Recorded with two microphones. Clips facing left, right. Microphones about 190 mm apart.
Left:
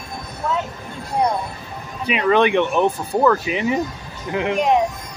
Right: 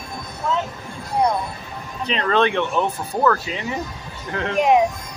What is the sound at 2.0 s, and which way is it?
Speech, 10° left (ahead or behind).